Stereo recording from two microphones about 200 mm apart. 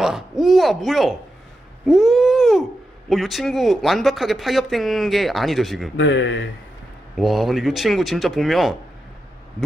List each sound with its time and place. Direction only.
0.0 s speech: centre (ahead or behind)
5.9 s speech: 65° left (ahead or behind)
7.2 s speech: centre (ahead or behind)